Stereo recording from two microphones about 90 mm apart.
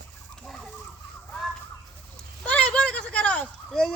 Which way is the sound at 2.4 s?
15° left (ahead or behind).